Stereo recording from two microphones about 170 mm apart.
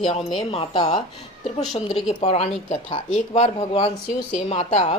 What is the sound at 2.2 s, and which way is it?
Speech, 40° left (ahead or behind).